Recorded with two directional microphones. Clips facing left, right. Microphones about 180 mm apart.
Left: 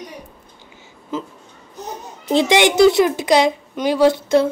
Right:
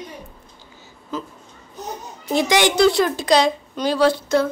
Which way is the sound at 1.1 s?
25° left (ahead or behind).